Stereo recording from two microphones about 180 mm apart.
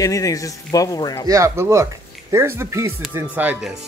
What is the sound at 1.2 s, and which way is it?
Speech, 15° right (ahead or behind).